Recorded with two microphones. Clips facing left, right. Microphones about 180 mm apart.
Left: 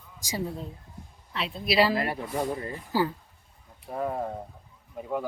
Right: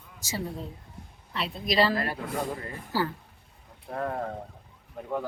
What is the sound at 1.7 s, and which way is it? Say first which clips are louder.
Speech: left 1 dB; 10° left (ahead or behind).